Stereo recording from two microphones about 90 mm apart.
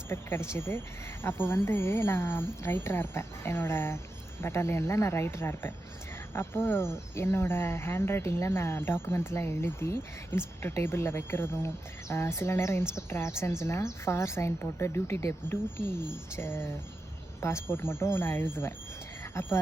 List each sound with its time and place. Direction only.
0.1 s speech: 25° left (ahead or behind)